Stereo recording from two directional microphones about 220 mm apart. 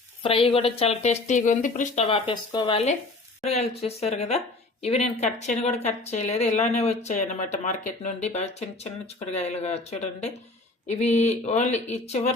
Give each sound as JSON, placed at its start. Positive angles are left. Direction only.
{"t": 0.2, "sound": "a woman's voice", "side_deg": 25}